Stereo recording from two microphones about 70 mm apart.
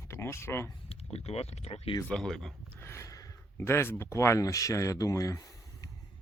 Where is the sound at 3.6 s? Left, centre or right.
Left.